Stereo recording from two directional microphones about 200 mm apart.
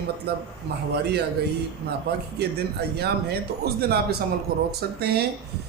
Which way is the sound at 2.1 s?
55° right (ahead or behind).